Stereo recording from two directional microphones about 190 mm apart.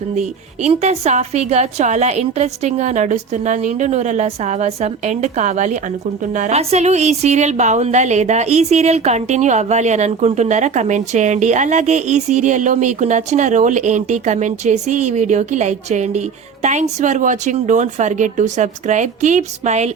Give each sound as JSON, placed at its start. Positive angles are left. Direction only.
{"t": 0.2, "sound": "a woman's voice", "side_deg": -35}